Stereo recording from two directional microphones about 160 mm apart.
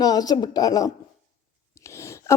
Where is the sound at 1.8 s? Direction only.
20° left (ahead or behind).